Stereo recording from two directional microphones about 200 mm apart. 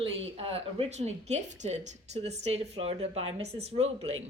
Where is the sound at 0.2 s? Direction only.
30° right (ahead or behind).